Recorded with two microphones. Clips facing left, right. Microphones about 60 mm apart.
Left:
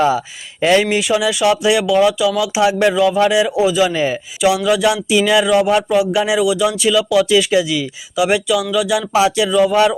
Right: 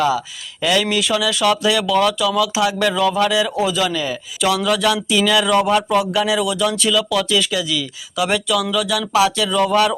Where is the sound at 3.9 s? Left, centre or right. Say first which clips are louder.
Left 5 dB; left.